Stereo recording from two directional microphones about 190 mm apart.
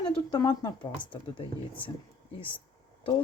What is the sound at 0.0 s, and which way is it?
Speech, 20° left (ahead or behind).